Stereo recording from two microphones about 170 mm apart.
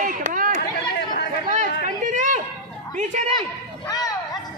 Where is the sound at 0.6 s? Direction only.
60° left (ahead or behind).